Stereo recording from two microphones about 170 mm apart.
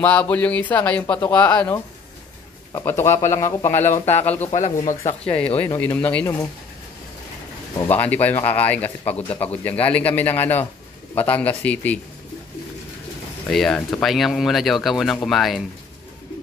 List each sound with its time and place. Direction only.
0.0 s speech: 10° left (ahead or behind)
3.9 s speech: 40° left (ahead or behind)
5.2 s speech: 5° left (ahead or behind)
7.9 s speech: 10° left (ahead or behind)
9.3 s speech: 35° left (ahead or behind)
9.8 s speech: 10° left (ahead or behind)
13.5 s speech: centre (ahead or behind)